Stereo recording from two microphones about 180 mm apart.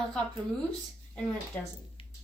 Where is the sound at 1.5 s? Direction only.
10° left (ahead or behind).